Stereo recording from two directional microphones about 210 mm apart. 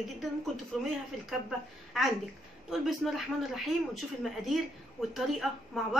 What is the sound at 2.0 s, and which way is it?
Speech, centre (ahead or behind).